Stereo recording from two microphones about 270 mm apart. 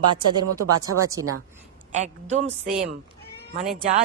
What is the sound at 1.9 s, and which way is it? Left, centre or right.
Speech, right.